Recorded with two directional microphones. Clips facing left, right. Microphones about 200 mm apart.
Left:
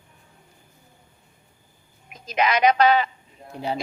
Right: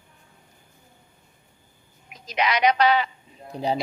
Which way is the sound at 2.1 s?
50° left (ahead or behind).